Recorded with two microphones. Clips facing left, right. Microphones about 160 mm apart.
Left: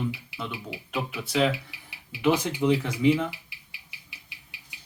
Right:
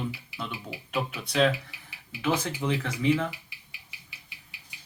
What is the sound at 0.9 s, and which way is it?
Speech, 5° left (ahead or behind).